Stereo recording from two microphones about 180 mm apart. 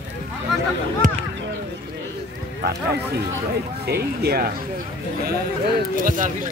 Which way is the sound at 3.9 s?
60° right (ahead or behind).